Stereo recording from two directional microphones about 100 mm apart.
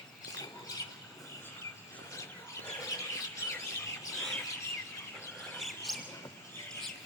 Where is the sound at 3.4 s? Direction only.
25° left (ahead or behind).